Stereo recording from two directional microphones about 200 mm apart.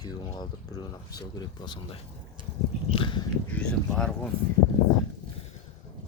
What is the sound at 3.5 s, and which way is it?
Speech, 5° left (ahead or behind).